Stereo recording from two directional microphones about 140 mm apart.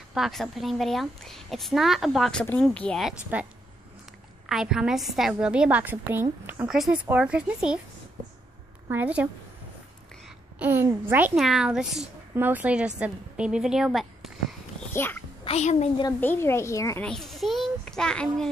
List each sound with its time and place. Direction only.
0.1 s a woman's voice: centre (ahead or behind)
3.0 s a woman's voice: 5° right (ahead or behind)
4.5 s a woman's voice: 5° right (ahead or behind)
8.8 s a woman's voice: 10° right (ahead or behind)
10.6 s a woman's voice: 15° right (ahead or behind)
12.4 s a woman's voice: 15° right (ahead or behind)
14.8 s a sound: 15° left (ahead or behind)
15.4 s a woman's voice: 50° left (ahead or behind)
16.2 s a child's voice: 15° left (ahead or behind)
17.0 s a child's voice: 5° left (ahead or behind)